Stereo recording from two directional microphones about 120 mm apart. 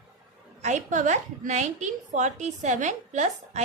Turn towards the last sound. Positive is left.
turn(degrees=-80)